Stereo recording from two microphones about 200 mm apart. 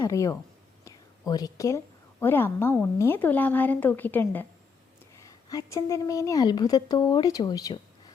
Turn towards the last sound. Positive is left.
turn(degrees=20)  # may be behind; listen again after turning